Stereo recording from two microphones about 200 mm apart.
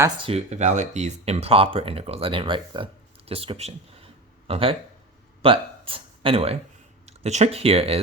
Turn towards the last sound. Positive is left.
turn(degrees=-30)  # may be behind; listen again after turning